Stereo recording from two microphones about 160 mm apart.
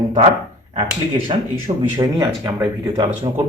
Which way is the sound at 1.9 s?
25° right (ahead or behind).